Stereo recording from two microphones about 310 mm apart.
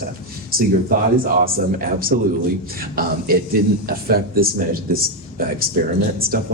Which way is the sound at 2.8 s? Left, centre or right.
Right.